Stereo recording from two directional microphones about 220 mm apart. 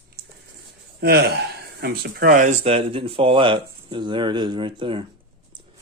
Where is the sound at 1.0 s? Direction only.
45° right (ahead or behind); by 5.0 s 25° right (ahead or behind).